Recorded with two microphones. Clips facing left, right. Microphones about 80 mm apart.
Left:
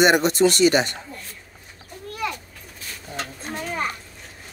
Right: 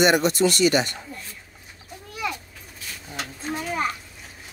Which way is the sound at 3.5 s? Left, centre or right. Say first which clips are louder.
Right 2 dB; centre.